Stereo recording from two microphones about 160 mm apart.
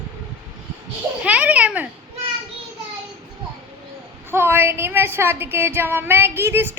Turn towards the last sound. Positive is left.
turn(degrees=-15)  # may be behind; listen again after turning